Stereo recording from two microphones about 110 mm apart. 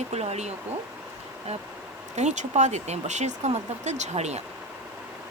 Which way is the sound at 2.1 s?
90° right.